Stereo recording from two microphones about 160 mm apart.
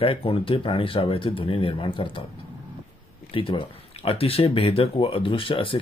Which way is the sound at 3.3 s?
35° left (ahead or behind).